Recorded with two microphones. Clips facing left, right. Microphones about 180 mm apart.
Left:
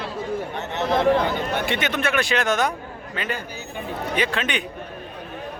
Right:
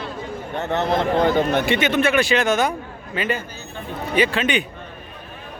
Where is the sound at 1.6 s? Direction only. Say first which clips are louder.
Right 5 dB; centre (ahead or behind).